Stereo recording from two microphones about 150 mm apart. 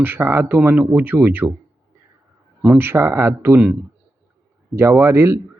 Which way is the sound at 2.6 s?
10° right (ahead or behind).